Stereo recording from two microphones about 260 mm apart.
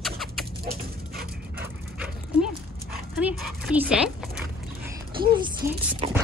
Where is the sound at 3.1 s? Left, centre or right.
Centre.